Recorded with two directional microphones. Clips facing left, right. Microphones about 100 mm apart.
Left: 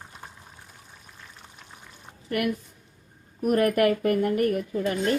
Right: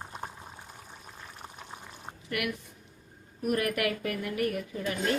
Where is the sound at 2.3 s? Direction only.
40° left (ahead or behind).